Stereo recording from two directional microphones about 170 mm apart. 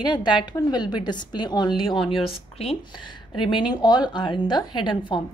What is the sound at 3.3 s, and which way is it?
A woman's voice, 30° left (ahead or behind).